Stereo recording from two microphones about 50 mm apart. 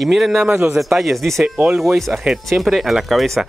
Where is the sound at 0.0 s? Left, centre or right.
Centre.